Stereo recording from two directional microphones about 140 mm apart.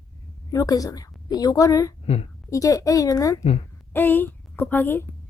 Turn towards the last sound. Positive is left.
turn(degrees=15)  # may be behind; listen again after turning